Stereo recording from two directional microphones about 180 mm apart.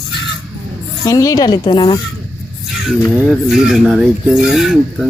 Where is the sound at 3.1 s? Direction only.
5° right (ahead or behind).